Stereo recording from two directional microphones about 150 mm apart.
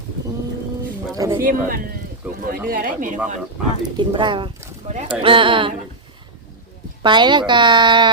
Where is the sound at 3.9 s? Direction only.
30° right (ahead or behind).